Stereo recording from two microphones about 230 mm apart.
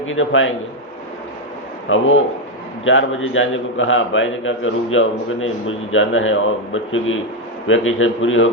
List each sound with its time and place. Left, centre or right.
0.0 s a man's voice: left
1.9 s a man's voice: left